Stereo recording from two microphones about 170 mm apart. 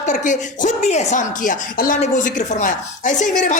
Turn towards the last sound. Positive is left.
turn(degrees=45)  # may be behind; listen again after turning